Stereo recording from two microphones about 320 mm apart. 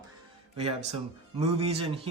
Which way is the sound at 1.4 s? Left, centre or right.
Centre.